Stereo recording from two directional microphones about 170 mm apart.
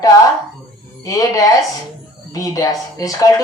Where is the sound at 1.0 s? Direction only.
20° left (ahead or behind).